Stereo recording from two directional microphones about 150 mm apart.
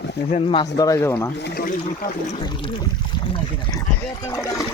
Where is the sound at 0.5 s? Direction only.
25° left (ahead or behind).